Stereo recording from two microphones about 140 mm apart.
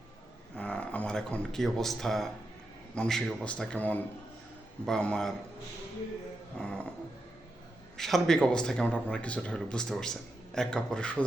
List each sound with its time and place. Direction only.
0.5 s speech: 10° left (ahead or behind)
6.6 s speech: 10° left (ahead or behind)
7.9 s speech: centre (ahead or behind)